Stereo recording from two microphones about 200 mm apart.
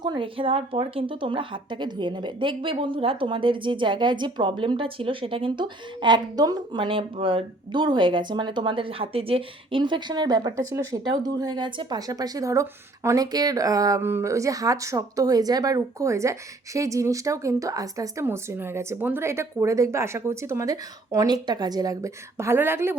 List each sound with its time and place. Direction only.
0.0 s speech: 25° right (ahead or behind)